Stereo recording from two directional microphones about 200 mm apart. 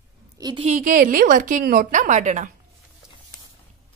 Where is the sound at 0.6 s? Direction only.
40° right (ahead or behind).